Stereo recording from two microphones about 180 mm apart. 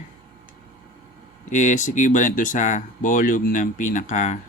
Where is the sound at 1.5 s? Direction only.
45° left (ahead or behind).